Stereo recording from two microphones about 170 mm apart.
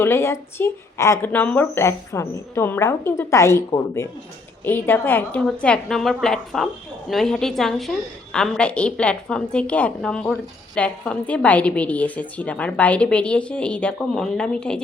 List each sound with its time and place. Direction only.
0.0 s a woman's voice: 15° left (ahead or behind)